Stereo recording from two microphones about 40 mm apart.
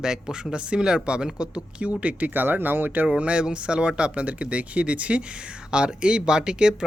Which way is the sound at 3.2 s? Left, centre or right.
Right.